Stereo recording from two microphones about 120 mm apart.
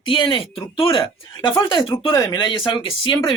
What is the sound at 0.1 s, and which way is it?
Speech, 45° left (ahead or behind).